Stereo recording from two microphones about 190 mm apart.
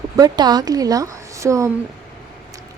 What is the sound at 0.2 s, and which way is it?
A woman's voice, 20° right (ahead or behind).